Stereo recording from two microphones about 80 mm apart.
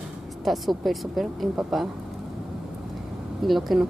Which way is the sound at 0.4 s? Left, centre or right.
Centre.